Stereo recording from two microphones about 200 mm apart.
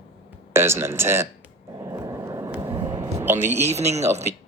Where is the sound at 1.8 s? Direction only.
15° right (ahead or behind).